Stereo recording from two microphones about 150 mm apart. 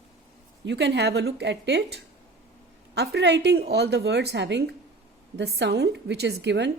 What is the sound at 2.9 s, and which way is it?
A woman's voice, 90° right.